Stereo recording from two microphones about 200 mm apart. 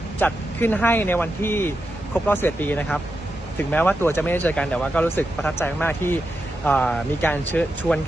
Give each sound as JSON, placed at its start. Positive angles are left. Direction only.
{"t": 0.2, "sound": "speech", "side_deg": 10}